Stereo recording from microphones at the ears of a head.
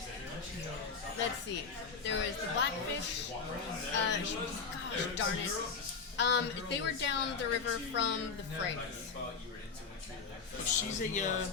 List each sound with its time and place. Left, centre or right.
1.1 s a woman's voice: left
10.7 s a woman's voice: left